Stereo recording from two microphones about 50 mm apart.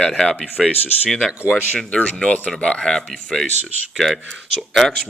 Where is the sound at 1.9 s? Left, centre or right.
Left.